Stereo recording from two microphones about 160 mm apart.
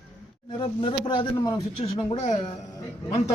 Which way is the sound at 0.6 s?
30° left (ahead or behind).